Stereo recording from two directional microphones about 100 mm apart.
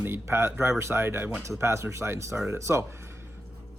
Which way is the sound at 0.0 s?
25° right (ahead or behind).